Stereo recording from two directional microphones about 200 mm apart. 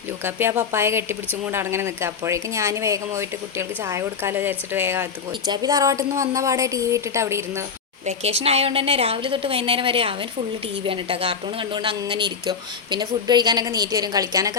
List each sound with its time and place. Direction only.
0.2 s speech: 10° right (ahead or behind)
8.0 s speech: 30° right (ahead or behind)